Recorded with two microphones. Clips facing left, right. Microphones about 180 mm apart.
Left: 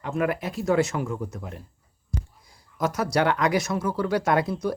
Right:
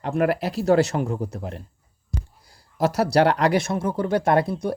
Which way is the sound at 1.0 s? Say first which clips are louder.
Right 3 dB; 35° right (ahead or behind).